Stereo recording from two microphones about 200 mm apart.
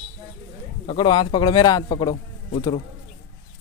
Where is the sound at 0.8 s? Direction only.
25° left (ahead or behind).